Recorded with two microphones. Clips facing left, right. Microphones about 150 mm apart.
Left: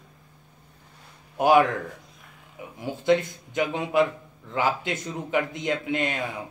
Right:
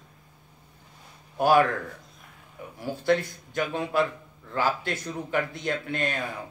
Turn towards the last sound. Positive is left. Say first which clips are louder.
# left 2 dB
turn(degrees=15)  # may be behind; listen again after turning